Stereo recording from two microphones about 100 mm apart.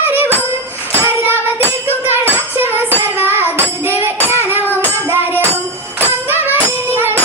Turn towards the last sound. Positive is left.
turn(degrees=-20)  # may be behind; listen again after turning